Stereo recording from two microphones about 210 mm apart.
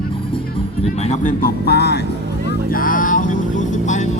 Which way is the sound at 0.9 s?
35° left (ahead or behind).